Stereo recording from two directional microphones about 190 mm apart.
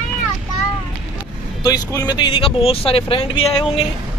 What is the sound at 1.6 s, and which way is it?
Speech, 20° left (ahead or behind).